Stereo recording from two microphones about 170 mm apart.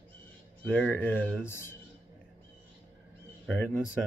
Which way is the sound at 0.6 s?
10° left (ahead or behind).